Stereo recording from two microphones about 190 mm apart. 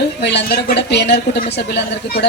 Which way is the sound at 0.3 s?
60° left (ahead or behind).